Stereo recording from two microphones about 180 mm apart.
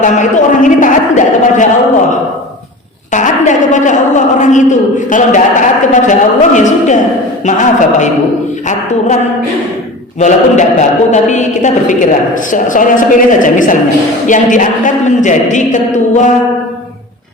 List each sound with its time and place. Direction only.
0.0 s a man's voice: 45° left (ahead or behind)
3.1 s a woman's voice: 45° left (ahead or behind)